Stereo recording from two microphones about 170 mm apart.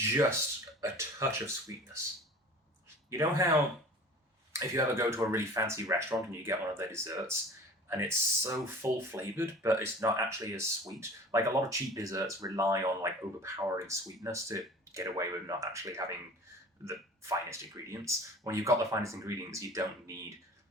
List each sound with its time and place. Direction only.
0.0 s speech: 15° right (ahead or behind)
3.1 s speech: 20° right (ahead or behind)
4.7 s speech: 15° right (ahead or behind)